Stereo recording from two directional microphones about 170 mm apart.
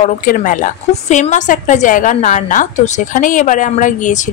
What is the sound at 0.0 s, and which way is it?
A woman's voice, 50° left (ahead or behind).